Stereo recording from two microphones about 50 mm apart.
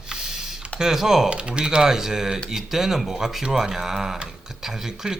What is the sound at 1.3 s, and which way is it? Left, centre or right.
Speech, right.